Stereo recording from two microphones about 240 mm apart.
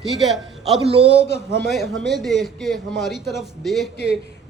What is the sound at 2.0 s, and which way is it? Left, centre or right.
Speech, centre.